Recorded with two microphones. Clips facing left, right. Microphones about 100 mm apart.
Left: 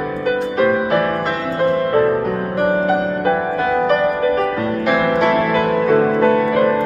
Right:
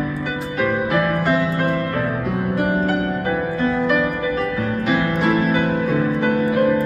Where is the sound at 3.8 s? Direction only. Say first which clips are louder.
Left 4 dB; 50° left (ahead or behind).